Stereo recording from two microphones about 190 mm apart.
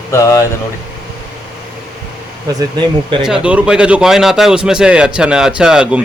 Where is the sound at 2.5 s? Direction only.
20° right (ahead or behind).